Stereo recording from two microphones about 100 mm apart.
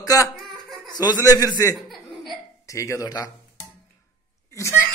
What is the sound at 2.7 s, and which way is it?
Speech, 30° left (ahead or behind).